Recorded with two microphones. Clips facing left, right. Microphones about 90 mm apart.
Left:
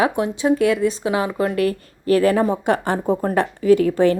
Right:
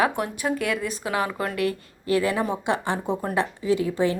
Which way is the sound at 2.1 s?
45° left (ahead or behind).